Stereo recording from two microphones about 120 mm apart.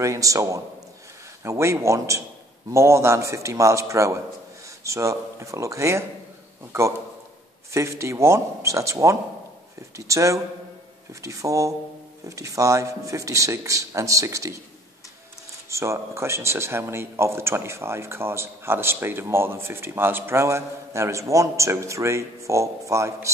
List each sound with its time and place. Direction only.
0.0 s speech: 25° right (ahead or behind)
15.7 s speech: 25° right (ahead or behind)